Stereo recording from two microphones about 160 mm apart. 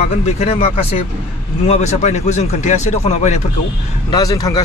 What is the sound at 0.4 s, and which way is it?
Speech, 40° left (ahead or behind).